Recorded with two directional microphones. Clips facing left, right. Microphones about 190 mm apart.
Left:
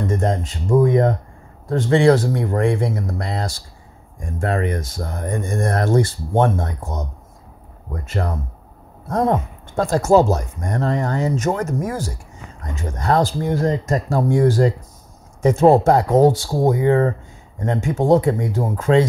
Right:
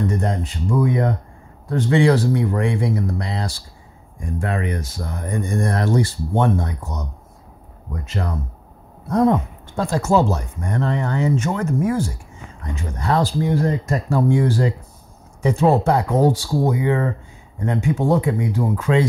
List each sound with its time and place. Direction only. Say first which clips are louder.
0.2 s speech: left 2 dB; 45° left (ahead or behind)
7.9 s speech: left 2 dB; 50° left (ahead or behind)